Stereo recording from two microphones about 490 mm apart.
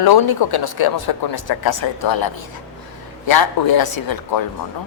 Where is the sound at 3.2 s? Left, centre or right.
Left.